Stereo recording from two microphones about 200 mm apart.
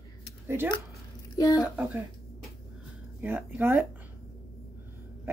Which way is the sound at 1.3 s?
15° left (ahead or behind).